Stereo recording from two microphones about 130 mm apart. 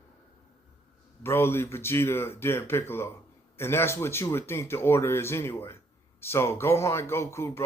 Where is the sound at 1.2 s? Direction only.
20° left (ahead or behind).